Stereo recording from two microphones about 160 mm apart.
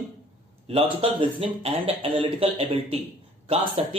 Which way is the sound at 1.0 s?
40° right (ahead or behind).